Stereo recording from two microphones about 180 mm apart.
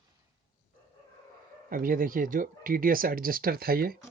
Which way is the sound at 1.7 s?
50° right (ahead or behind).